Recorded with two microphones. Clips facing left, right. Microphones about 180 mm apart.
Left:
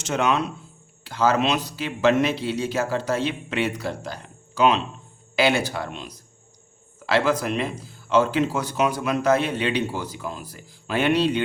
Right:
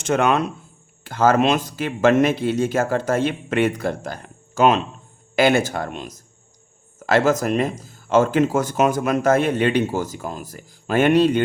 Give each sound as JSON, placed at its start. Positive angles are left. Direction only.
{"t": 0.0, "sound": "speech", "side_deg": -55}